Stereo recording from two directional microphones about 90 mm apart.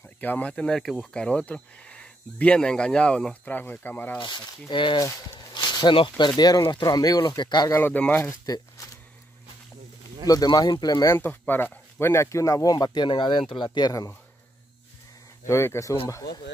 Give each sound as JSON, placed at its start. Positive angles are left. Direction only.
{"t": 0.2, "sound": "speech", "side_deg": 20}
{"t": 4.2, "sound": "speech", "side_deg": 55}
{"t": 5.5, "sound": "a sound", "side_deg": 55}
{"t": 5.9, "sound": "speech", "side_deg": 60}
{"t": 7.7, "sound": "speech", "side_deg": 20}
{"t": 8.2, "sound": "speech", "side_deg": 40}
{"t": 10.2, "sound": "speech", "side_deg": 45}
{"t": 11.1, "sound": "speech", "side_deg": 25}
{"t": 13.7, "sound": "speech", "side_deg": 45}
{"t": 15.4, "sound": "speech", "side_deg": 30}